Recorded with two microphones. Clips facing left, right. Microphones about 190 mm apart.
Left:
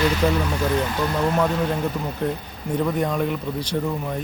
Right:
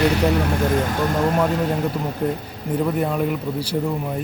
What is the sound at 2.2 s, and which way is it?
Speech, 10° right (ahead or behind).